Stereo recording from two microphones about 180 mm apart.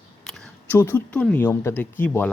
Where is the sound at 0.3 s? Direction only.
Centre (ahead or behind).